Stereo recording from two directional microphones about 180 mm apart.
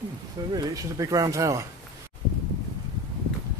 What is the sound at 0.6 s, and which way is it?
Speech, 20° right (ahead or behind).